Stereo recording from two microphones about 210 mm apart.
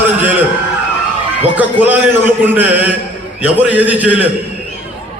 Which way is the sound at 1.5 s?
10° right (ahead or behind).